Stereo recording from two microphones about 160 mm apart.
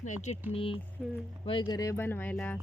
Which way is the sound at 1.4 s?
30° left (ahead or behind).